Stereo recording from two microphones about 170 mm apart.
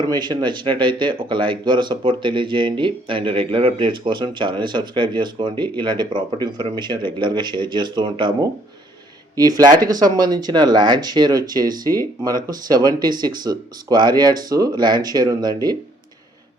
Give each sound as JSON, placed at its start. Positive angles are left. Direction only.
{"t": 0.0, "sound": "speech", "side_deg": -25}